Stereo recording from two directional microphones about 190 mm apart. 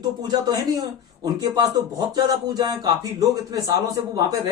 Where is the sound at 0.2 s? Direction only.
20° right (ahead or behind).